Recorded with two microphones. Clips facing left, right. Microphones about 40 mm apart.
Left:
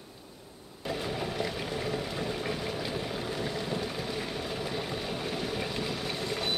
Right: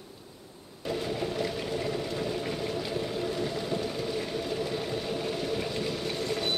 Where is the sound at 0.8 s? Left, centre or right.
Centre.